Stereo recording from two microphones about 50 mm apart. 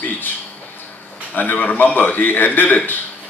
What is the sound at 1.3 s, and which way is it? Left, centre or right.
Speech, left.